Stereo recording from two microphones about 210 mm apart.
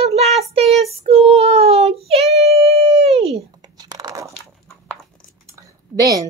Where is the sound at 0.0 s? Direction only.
30° right (ahead or behind).